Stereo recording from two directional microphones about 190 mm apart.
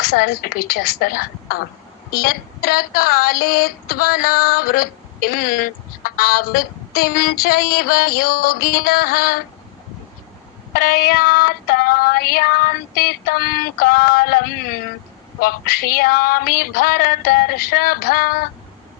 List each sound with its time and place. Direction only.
0.0 s female singing: 55° left (ahead or behind)
10.8 s female singing: 50° left (ahead or behind)